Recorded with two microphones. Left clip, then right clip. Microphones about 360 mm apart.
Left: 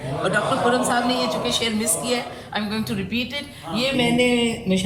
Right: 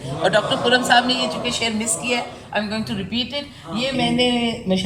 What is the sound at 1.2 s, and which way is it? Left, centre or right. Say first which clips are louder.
Speech: even; centre.